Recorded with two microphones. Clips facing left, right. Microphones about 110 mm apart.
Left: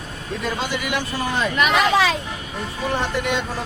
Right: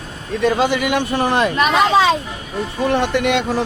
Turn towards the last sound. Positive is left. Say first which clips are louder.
# right 6 dB
turn(degrees=-75)  # may be behind; listen again after turning